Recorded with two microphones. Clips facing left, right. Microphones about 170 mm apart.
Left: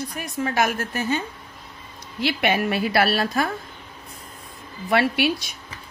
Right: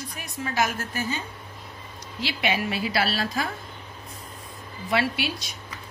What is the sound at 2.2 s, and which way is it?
A woman's voice, 55° left (ahead or behind).